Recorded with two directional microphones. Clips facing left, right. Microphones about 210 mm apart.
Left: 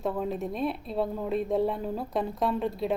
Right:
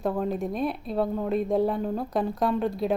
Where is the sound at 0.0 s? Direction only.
Centre (ahead or behind).